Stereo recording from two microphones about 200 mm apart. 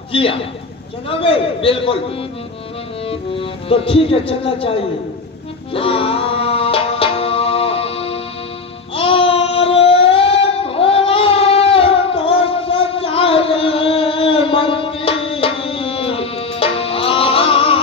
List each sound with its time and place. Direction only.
0.1 s speech: 30° left (ahead or behind)
5.7 s music: 30° left (ahead or behind)
8.9 s child singing: 30° left (ahead or behind)